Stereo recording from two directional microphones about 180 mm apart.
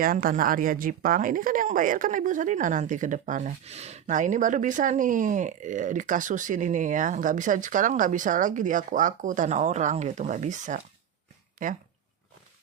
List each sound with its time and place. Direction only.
0.0 s a woman's voice: 50° right (ahead or behind)